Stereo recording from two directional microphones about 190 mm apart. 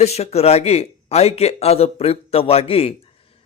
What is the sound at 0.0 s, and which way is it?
Speech, 35° left (ahead or behind).